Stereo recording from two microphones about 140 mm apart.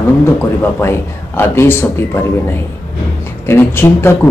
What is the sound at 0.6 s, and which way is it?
Speech, 15° left (ahead or behind).